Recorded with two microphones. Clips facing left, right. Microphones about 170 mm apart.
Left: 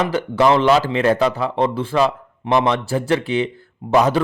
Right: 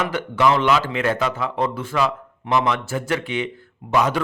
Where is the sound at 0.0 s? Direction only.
35° left (ahead or behind).